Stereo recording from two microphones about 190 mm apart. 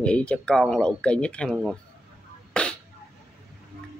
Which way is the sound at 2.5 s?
5° left (ahead or behind).